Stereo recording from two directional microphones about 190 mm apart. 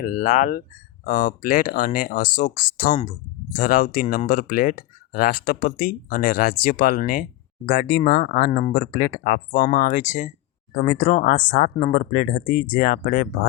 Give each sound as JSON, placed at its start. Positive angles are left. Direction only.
{"t": 0.0, "sound": "speech", "side_deg": 45}